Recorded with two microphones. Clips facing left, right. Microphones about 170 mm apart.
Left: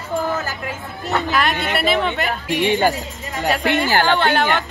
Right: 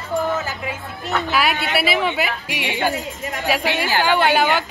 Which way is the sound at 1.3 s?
5° right (ahead or behind).